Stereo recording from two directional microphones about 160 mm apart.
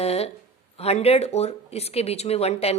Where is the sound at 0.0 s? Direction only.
40° left (ahead or behind).